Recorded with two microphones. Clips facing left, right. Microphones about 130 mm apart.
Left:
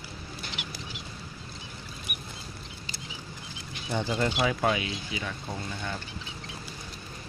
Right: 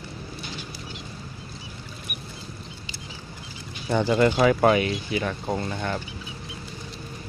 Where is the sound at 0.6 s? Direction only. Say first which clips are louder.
Right 2 dB; 90° left.